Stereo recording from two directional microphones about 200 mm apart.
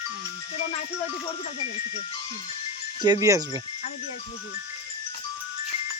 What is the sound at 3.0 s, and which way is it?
Speech, 20° right (ahead or behind).